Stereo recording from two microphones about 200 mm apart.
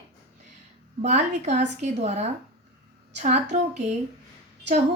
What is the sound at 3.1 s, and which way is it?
Speech, 35° right (ahead or behind).